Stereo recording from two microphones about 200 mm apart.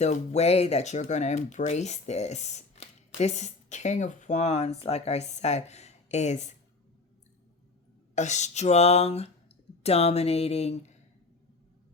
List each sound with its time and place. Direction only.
0.0 s speech: 35° left (ahead or behind)
8.1 s speech: 35° left (ahead or behind)